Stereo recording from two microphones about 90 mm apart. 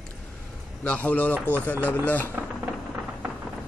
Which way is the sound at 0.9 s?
15° left (ahead or behind).